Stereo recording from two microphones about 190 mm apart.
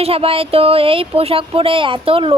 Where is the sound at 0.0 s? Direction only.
30° right (ahead or behind).